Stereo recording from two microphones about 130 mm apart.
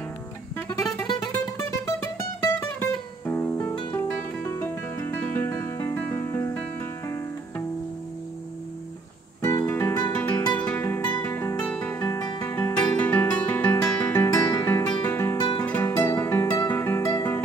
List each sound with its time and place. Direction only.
0.7 s music: 25° left (ahead or behind)
9.4 s music: 15° left (ahead or behind)
12.0 s music: 30° left (ahead or behind)
12.4 s music: 15° left (ahead or behind)